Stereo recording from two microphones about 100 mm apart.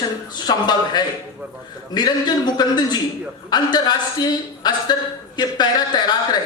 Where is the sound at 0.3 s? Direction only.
45° left (ahead or behind).